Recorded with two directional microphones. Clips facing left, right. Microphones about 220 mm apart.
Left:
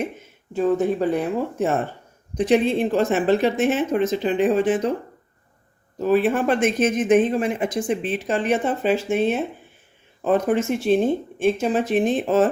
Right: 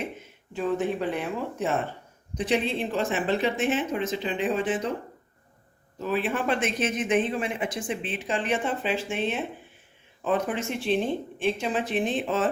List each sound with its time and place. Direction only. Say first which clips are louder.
0.5 s speech: left 7 dB; 40° left (ahead or behind)
6.0 s speech: left 8 dB; 45° left (ahead or behind)